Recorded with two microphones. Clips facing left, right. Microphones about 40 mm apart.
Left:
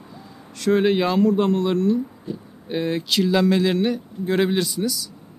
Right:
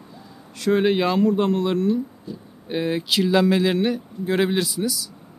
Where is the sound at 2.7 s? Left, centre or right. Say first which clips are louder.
Even; centre.